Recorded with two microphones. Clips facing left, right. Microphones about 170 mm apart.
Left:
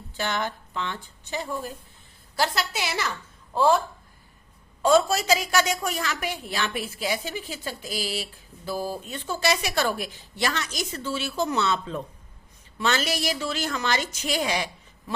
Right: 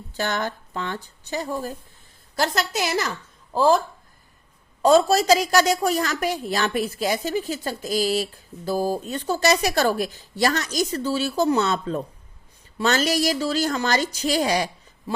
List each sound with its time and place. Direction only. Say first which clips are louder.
0.1 s a woman's voice: right 3 dB; 45° right (ahead or behind)
4.8 s a woman's voice: right 4 dB; 40° right (ahead or behind)